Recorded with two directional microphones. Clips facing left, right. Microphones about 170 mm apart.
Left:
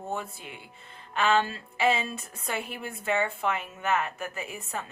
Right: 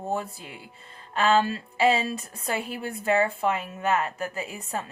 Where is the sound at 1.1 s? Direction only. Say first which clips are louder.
Right 3 dB; 35° right (ahead or behind).